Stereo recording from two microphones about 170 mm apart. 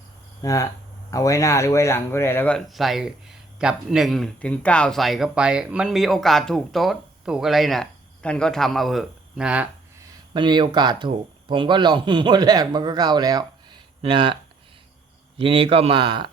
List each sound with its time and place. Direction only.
0.4 s speech: 20° left (ahead or behind)
2.6 s speech: centre (ahead or behind)
10.0 s speech: 25° right (ahead or behind)
15.4 s a man's voice: 35° right (ahead or behind)